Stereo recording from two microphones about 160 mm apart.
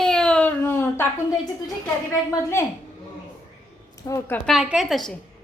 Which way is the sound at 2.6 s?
15° left (ahead or behind).